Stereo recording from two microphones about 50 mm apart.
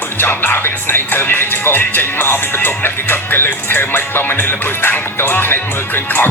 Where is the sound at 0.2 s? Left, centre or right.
Left.